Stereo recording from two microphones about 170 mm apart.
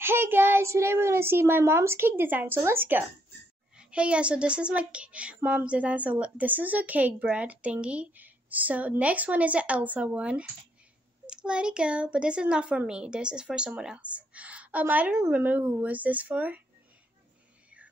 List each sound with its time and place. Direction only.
0.0 s a woman's voice: 15° right (ahead or behind)